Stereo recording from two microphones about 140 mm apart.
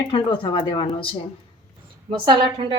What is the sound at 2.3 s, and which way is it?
Speech, 40° right (ahead or behind).